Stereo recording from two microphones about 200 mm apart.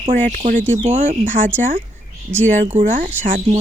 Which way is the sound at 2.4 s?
40° right (ahead or behind).